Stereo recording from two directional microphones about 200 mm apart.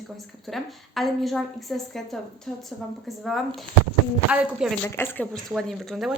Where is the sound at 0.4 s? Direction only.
Centre (ahead or behind).